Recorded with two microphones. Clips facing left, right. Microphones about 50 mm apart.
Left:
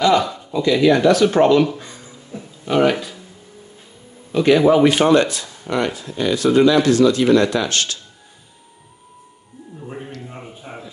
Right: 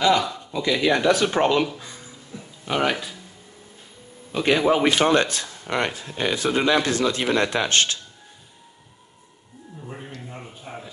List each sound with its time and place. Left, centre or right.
0.0 s a man's voice: centre
4.3 s a man's voice: centre
5.1 s speech: right
9.8 s speech: centre
10.2 s a sound: centre